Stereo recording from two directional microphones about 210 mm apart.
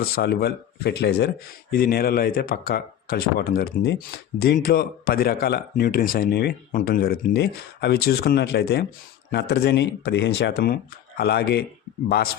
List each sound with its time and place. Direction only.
0.0 s speech: 50° left (ahead or behind)